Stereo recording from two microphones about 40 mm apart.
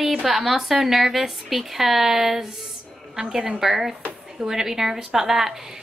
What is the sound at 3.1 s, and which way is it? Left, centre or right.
Speech, centre.